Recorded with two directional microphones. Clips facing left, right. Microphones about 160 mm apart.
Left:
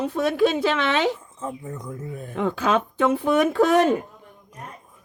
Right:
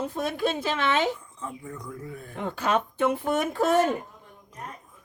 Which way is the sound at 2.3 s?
90° left.